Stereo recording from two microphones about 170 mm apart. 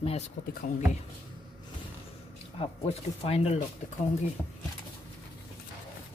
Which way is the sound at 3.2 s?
35° left (ahead or behind).